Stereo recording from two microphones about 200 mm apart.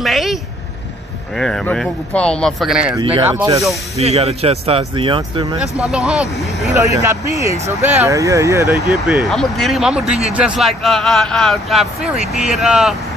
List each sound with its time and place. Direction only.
0.0 s speech: centre (ahead or behind)
3.0 s speech: 25° right (ahead or behind)
3.3 s speech: 15° right (ahead or behind)
3.9 s speech: 30° right (ahead or behind)
5.8 s speech: centre (ahead or behind)
6.7 s speech: 15° right (ahead or behind)
8.8 s speech: centre (ahead or behind)